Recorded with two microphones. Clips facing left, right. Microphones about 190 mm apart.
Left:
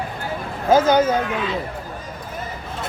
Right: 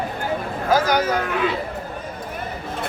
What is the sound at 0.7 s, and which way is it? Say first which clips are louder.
Speech: left 4 dB; 25° left (ahead or behind).